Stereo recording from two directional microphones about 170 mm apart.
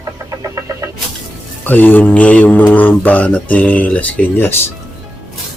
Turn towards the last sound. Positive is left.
turn(degrees=15)  # may be behind; listen again after turning